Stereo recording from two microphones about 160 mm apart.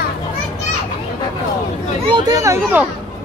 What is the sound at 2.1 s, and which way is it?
Speech, 20° right (ahead or behind).